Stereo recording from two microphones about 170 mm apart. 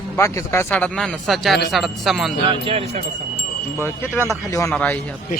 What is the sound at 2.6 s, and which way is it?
Speech, 35° right (ahead or behind).